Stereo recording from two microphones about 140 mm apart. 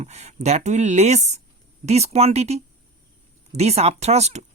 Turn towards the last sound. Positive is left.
turn(degrees=-50)  # may be behind; listen again after turning